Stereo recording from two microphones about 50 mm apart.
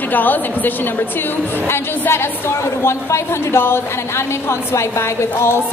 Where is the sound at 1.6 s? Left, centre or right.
Left.